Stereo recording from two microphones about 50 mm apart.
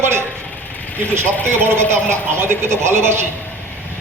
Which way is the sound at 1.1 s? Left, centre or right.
Right.